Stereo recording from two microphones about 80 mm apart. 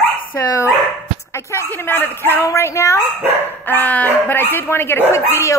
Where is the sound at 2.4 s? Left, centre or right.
Left.